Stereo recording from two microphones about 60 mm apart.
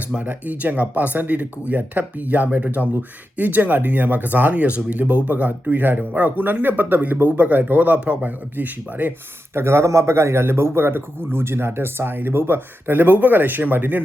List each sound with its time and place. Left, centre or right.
0.1 s speech: right
9.6 s a man's voice: right